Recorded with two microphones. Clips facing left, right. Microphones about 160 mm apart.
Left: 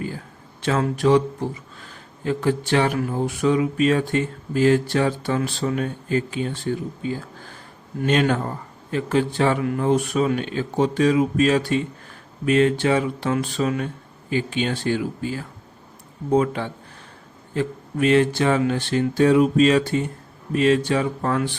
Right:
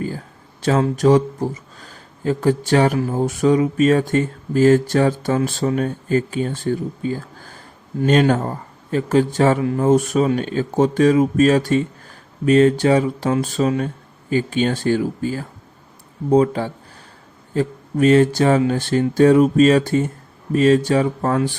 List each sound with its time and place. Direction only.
0.6 s speech: 40° right (ahead or behind)